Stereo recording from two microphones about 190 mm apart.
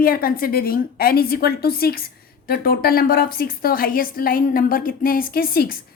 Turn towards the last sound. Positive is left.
turn(degrees=50)  # may be behind; listen again after turning